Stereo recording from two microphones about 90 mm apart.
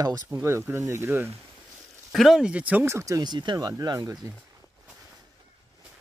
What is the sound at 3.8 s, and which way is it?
Speech, 40° right (ahead or behind).